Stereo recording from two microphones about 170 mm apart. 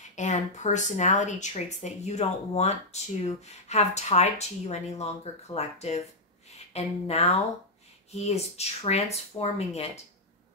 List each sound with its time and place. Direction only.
0.1 s speech: 45° left (ahead or behind)